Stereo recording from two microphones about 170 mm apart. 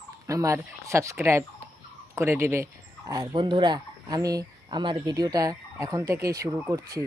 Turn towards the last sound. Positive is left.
turn(degrees=-20)  # may be behind; listen again after turning